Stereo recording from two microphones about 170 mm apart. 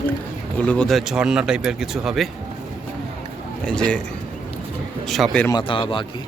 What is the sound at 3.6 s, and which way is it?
Speech, 5° left (ahead or behind).